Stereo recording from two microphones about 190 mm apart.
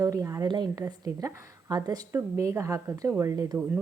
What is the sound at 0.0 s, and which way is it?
A woman's voice, 15° right (ahead or behind).